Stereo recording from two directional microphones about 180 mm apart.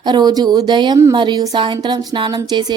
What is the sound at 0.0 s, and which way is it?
Speech, 25° right (ahead or behind).